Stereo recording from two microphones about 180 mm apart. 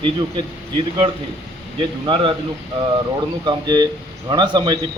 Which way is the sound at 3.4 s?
25° right (ahead or behind).